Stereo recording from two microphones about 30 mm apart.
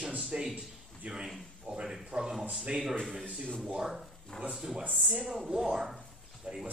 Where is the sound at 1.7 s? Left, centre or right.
Right.